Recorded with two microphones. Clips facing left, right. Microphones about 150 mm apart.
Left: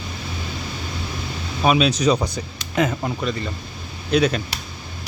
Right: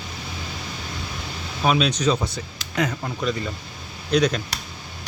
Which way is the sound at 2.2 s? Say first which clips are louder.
Left 3 dB; 20° left (ahead or behind).